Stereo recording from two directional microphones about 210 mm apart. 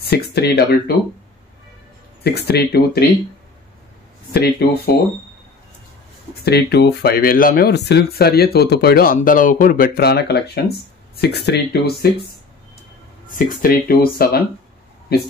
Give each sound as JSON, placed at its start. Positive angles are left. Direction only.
{"t": 0.0, "sound": "speech", "side_deg": 50}
{"t": 2.2, "sound": "speech", "side_deg": 50}
{"t": 4.3, "sound": "speech", "side_deg": 50}
{"t": 6.4, "sound": "speech", "side_deg": 50}
{"t": 13.3, "sound": "speech", "side_deg": 40}